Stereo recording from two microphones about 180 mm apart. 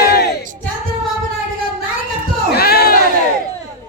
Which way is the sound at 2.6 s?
60° left (ahead or behind).